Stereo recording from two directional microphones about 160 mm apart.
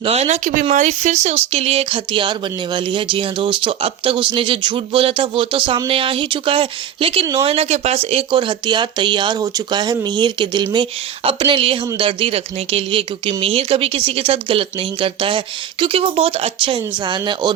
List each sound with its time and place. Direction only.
0.0 s speech: 40° right (ahead or behind)